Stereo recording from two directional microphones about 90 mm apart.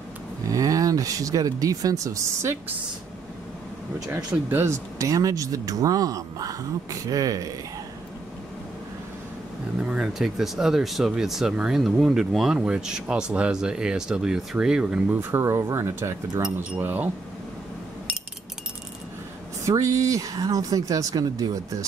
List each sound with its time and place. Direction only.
0.5 s speech: 40° right (ahead or behind)
4.5 s speech: 30° right (ahead or behind)
9.8 s speech: 10° right (ahead or behind)
15.1 s speech: 30° right (ahead or behind)
19.6 s speech: 35° right (ahead or behind)